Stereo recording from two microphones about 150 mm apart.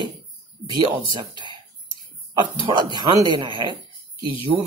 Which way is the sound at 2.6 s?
30° right (ahead or behind).